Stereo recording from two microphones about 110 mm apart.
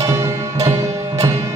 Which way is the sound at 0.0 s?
25° right (ahead or behind).